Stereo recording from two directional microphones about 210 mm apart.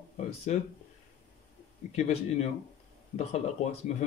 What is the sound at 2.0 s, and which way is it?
Speech, 35° left (ahead or behind).